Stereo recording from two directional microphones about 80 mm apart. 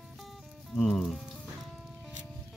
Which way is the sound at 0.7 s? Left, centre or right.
Centre.